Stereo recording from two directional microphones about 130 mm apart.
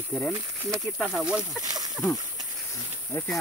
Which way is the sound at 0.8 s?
Centre (ahead or behind).